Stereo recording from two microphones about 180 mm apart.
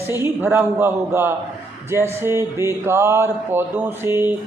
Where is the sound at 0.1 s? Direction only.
15° right (ahead or behind).